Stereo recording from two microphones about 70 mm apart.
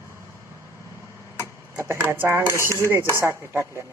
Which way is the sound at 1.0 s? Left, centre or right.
Right.